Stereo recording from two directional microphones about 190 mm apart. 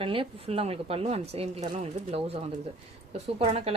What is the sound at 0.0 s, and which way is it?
A woman's voice, 30° right (ahead or behind).